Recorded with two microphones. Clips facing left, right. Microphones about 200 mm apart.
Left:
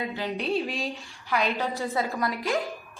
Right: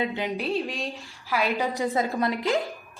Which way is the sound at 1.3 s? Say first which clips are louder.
Right 1 dB; 10° right (ahead or behind).